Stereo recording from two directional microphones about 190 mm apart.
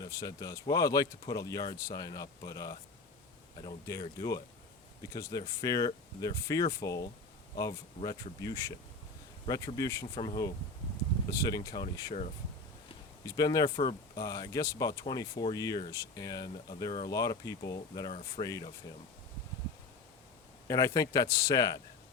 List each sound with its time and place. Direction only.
0.0 s speech: 20° left (ahead or behind)
13.2 s speech: 20° left (ahead or behind)
20.7 s speech: 20° left (ahead or behind)